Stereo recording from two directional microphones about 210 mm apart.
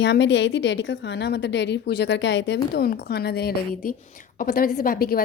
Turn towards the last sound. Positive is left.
turn(degrees=45)  # may be behind; listen again after turning